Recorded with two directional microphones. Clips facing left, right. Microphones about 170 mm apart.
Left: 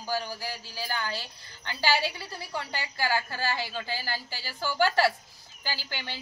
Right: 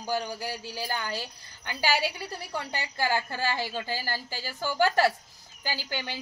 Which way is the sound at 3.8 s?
50° right (ahead or behind).